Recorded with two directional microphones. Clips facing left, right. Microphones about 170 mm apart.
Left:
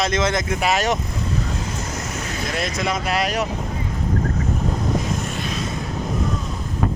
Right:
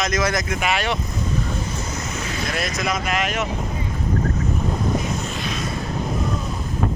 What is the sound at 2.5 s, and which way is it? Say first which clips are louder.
Speech: left 1 dB; 25° left (ahead or behind).